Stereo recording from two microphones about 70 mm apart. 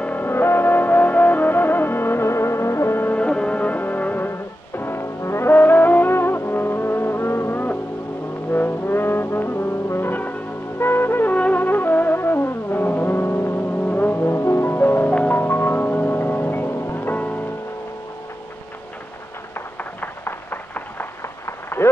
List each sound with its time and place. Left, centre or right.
0.0 s music: left
3.2 s music: centre; by 5.5 s left
5.5 s music: left
8.5 s brass instrument: left
11.3 s music: left
19.8 s a sound: left